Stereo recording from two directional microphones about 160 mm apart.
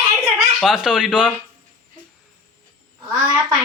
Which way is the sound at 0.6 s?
5° right (ahead or behind).